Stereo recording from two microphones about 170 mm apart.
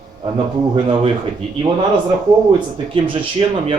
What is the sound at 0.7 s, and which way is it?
Speech, 30° right (ahead or behind).